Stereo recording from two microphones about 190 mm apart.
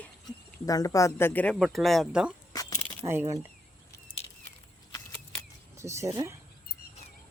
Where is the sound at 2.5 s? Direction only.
20° left (ahead or behind).